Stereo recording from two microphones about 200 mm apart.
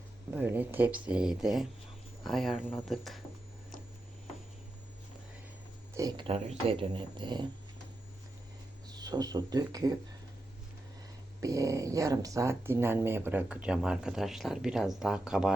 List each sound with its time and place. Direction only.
0.3 s speech: 10° right (ahead or behind)
5.9 s speech: 20° right (ahead or behind)
8.9 s speech: 20° right (ahead or behind)
11.3 s speech: 15° right (ahead or behind)